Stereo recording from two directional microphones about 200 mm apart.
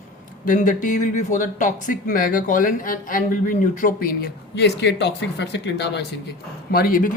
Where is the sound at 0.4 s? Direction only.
40° left (ahead or behind).